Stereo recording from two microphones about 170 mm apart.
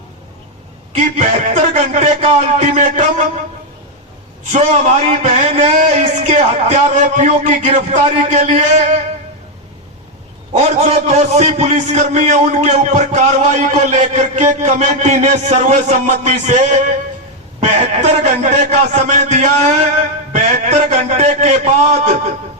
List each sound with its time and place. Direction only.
0.9 s a man's voice: 45° right (ahead or behind)
4.5 s a man's voice: 40° right (ahead or behind)
10.5 s a man's voice: 40° right (ahead or behind)